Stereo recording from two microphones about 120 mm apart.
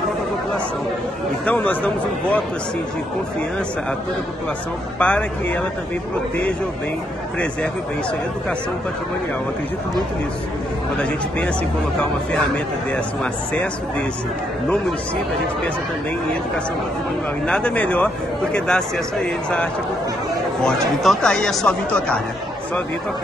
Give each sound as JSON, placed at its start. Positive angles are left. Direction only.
{"t": 1.4, "sound": "speech", "side_deg": 15}
{"t": 4.9, "sound": "speech", "side_deg": 10}
{"t": 11.0, "sound": "speech", "side_deg": 10}
{"t": 12.9, "sound": "speech", "side_deg": 10}
{"t": 17.5, "sound": "speech", "side_deg": 10}
{"t": 20.6, "sound": "speech", "side_deg": 5}